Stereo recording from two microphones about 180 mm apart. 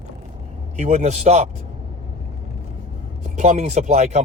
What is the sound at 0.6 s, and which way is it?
Speech, 40° right (ahead or behind).